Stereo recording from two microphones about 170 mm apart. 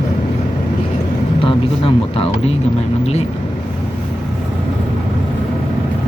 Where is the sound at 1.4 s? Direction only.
30° left (ahead or behind).